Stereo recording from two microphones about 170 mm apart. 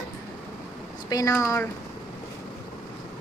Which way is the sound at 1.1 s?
15° left (ahead or behind).